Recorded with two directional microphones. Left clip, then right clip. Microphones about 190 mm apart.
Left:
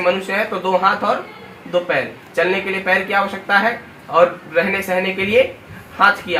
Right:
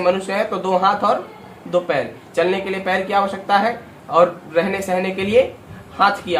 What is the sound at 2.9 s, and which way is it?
Speech, 30° right (ahead or behind).